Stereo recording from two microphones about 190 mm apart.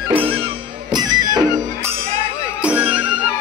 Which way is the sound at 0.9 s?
20° right (ahead or behind).